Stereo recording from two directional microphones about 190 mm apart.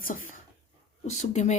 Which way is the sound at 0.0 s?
45° left (ahead or behind).